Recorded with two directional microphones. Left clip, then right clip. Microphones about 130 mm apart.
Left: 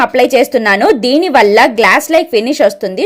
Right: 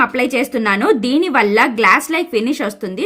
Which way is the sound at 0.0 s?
35° left (ahead or behind).